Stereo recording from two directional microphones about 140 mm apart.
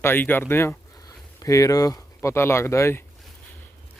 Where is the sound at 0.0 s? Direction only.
15° left (ahead or behind).